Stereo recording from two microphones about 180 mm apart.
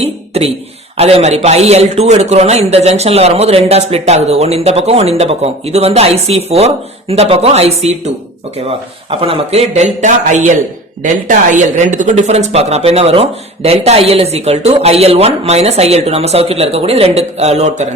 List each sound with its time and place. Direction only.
0.0 s beatboxing: 35° right (ahead or behind)
0.9 s a man's voice: 35° right (ahead or behind)